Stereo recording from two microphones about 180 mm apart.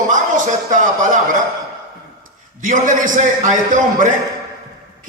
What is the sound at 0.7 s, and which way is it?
Speech, 45° right (ahead or behind).